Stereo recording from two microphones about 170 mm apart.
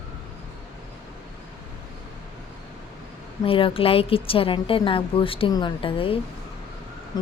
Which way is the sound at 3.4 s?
30° left (ahead or behind).